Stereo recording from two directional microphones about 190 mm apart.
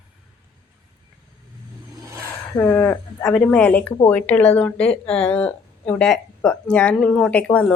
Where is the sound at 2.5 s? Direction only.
10° left (ahead or behind).